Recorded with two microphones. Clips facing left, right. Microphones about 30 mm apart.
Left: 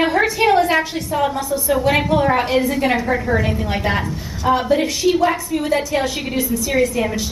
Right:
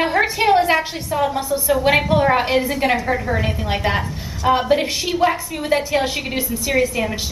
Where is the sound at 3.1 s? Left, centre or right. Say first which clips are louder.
Left 3 dB; centre.